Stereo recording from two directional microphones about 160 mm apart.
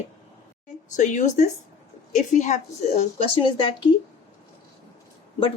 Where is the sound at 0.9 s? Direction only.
50° left (ahead or behind); by 3.8 s 30° left (ahead or behind).